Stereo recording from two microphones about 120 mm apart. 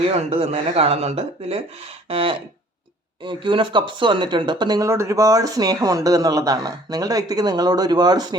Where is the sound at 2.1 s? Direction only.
50° right (ahead or behind).